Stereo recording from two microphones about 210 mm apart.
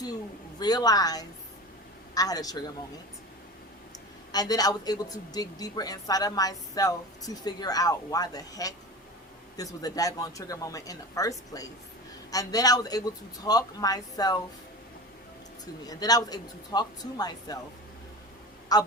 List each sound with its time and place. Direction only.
0.6 s a woman's voice: 20° left (ahead or behind)
4.3 s a woman's voice: 20° left (ahead or behind)
15.9 s a woman's voice: 20° left (ahead or behind)
18.7 s a woman's voice: 20° left (ahead or behind)